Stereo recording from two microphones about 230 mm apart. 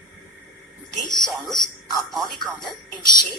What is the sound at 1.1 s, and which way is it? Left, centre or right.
Speech, centre.